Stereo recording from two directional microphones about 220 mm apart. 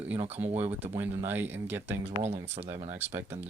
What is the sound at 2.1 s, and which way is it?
Speech, 30° right (ahead or behind).